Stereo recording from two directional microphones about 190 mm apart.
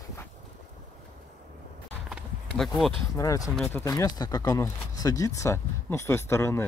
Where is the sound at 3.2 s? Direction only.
15° left (ahead or behind).